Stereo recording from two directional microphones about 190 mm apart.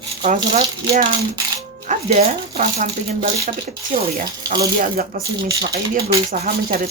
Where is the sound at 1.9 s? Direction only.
35° right (ahead or behind).